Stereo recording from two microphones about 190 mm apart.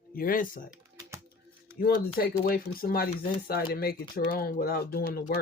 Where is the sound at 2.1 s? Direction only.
50° left (ahead or behind).